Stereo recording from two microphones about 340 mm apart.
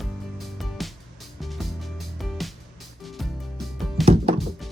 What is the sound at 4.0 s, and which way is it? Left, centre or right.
Music, centre.